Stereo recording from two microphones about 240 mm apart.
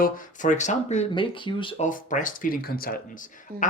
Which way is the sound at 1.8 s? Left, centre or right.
Left.